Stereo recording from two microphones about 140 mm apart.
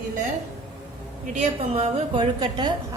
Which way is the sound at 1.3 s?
45° right (ahead or behind).